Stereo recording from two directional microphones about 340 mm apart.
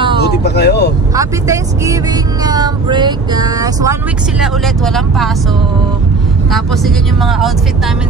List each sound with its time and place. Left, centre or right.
0.2 s speech: left
1.1 s speech: centre
4.4 s speech: centre
6.5 s speech: centre